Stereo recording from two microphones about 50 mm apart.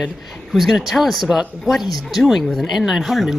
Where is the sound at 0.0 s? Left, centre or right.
Centre.